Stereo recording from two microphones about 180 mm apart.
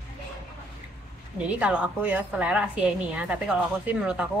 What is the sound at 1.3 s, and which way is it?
A woman's voice, 5° right (ahead or behind).